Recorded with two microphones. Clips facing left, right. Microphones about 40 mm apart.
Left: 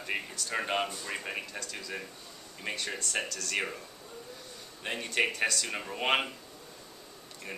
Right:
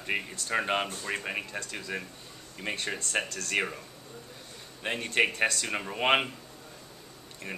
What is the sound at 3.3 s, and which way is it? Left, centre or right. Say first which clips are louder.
Speech: right 2 dB; right.